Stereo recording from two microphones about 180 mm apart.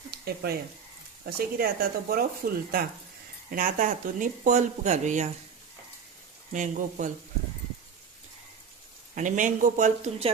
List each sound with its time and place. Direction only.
0.1 s a sound: 60° right (ahead or behind)
1.2 s speech: 55° right (ahead or behind)
6.5 s speech: 45° right (ahead or behind)
9.1 s speech: 45° right (ahead or behind)